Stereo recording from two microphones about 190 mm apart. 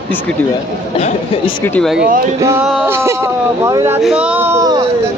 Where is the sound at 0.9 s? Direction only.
30° left (ahead or behind).